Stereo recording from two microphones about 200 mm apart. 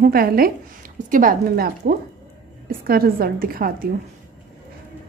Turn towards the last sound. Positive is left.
turn(degrees=-45)  # may be behind; listen again after turning